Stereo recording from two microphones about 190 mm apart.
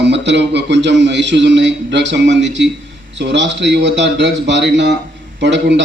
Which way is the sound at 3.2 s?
65° right (ahead or behind).